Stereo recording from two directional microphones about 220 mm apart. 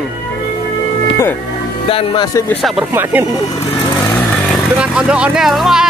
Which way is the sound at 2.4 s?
Centre (ahead or behind).